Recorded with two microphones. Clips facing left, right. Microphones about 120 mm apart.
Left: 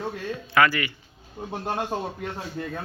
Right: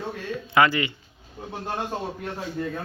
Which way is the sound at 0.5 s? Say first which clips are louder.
Right 1 dB; 20° right (ahead or behind).